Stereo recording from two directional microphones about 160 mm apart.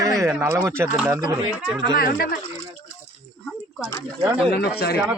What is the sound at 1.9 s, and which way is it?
Speech, 70° left (ahead or behind).